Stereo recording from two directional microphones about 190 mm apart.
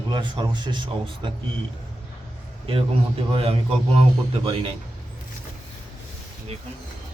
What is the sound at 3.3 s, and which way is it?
Speech, 30° right (ahead or behind).